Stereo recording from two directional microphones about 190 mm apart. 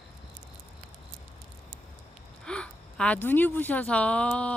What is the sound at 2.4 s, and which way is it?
A woman's voice, 5° left (ahead or behind).